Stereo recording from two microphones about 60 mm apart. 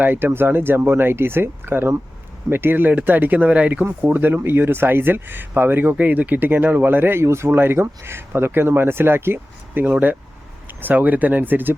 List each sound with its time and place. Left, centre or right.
0.0 s speech: right
4.0 s speech: right